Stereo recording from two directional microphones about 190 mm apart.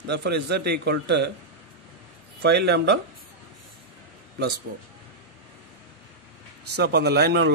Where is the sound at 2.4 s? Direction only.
60° right (ahead or behind).